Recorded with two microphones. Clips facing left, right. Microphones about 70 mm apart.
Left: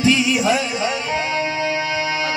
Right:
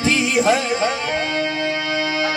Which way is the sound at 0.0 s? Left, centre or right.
Right.